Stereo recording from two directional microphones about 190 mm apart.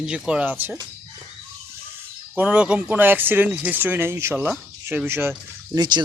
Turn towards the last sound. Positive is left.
turn(degrees=-25)  # may be behind; listen again after turning